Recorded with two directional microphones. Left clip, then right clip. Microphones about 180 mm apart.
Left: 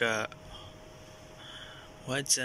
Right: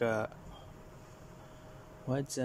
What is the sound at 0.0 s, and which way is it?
Speech, 25° right (ahead or behind).